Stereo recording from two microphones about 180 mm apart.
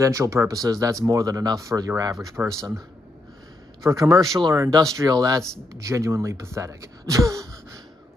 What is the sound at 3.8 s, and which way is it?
Speech, 20° right (ahead or behind).